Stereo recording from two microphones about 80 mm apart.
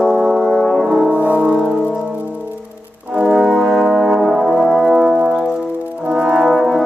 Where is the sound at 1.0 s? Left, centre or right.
Centre.